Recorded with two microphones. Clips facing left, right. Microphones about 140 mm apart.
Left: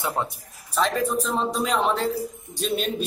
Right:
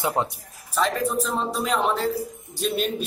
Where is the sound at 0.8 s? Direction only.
Centre (ahead or behind).